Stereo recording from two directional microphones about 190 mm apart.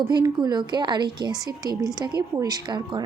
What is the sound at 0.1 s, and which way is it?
A woman's voice, 20° right (ahead or behind).